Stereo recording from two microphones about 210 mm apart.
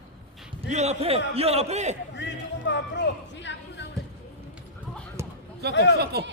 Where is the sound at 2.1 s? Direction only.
55° left (ahead or behind).